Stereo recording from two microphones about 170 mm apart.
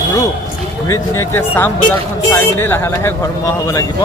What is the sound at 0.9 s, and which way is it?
Speech, 15° left (ahead or behind).